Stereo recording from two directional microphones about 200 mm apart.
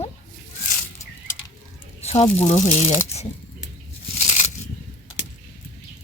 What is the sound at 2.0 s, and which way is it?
Speech, 30° left (ahead or behind).